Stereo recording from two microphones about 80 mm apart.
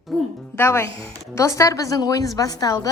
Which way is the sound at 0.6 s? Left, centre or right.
Left.